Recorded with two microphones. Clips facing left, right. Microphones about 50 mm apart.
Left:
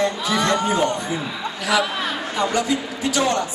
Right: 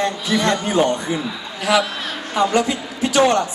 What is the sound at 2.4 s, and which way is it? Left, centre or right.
A man's voice, right.